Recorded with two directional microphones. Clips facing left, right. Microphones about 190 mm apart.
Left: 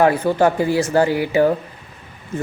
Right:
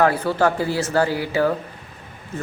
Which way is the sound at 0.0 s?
15° left (ahead or behind).